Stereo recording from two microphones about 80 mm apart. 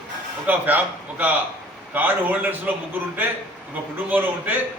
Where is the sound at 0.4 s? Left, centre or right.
Right.